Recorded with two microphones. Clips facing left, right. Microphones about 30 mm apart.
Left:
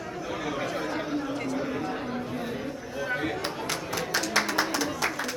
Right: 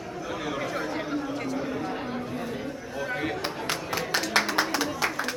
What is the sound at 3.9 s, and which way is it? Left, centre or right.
Music, right.